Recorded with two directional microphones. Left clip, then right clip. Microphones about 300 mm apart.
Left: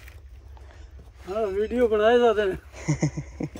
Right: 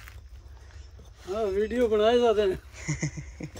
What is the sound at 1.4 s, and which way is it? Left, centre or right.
Speech, right.